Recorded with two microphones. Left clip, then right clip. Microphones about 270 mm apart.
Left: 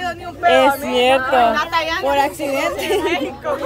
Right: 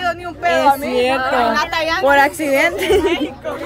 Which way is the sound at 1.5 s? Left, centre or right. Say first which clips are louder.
Even; right.